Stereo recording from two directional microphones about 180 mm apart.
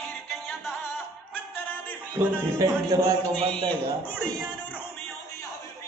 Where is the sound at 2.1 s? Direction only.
20° right (ahead or behind).